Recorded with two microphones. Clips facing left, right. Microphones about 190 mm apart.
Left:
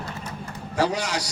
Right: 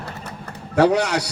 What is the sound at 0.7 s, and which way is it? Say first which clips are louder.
Speech: right 8 dB; 60° right (ahead or behind).